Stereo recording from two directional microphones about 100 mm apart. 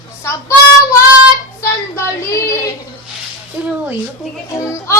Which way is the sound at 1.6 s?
30° left (ahead or behind).